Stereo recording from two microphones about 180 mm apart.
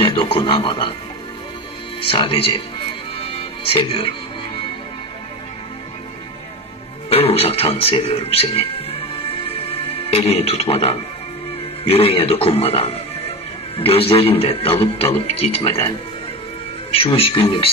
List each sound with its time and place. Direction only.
0.0 s speech: 30° left (ahead or behind)
2.0 s a man's voice: 30° left (ahead or behind)
3.2 s music: 30° left (ahead or behind)
7.1 s music: 35° left (ahead or behind)
11.8 s a man's voice: 30° left (ahead or behind)
16.9 s a man's voice: 30° left (ahead or behind)